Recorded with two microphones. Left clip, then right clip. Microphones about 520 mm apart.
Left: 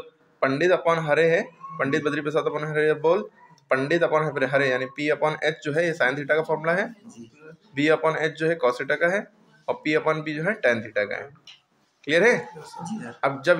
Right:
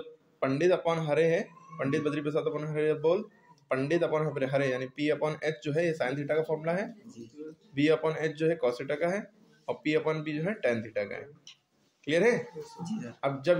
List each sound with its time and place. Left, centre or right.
0.4 s a man's voice: right